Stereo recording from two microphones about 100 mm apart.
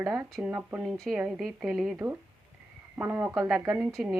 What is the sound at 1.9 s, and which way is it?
A woman's voice, 15° right (ahead or behind).